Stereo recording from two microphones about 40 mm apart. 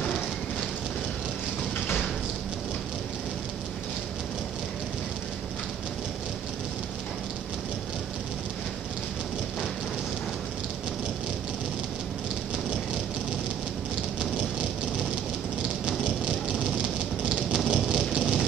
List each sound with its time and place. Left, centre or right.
16.0 s vehicle: right